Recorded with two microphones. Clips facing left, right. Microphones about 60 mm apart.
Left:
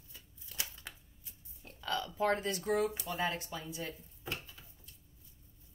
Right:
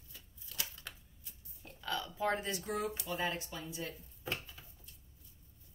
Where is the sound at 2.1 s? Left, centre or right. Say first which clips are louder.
Left 3 dB; left.